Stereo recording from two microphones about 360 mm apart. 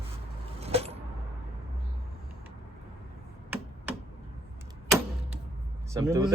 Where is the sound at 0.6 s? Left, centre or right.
Centre.